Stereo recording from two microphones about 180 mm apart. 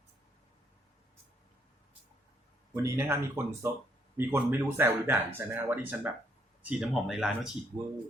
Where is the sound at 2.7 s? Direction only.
15° right (ahead or behind).